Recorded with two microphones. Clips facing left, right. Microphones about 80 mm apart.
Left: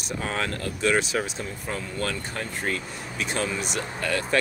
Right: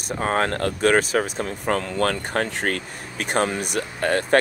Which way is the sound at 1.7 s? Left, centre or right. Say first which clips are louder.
Right 9 dB; right.